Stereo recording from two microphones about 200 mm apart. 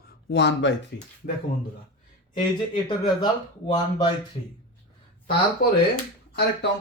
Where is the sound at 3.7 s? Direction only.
20° left (ahead or behind).